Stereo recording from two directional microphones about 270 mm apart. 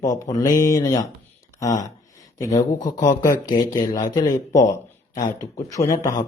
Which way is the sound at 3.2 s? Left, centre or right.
Centre.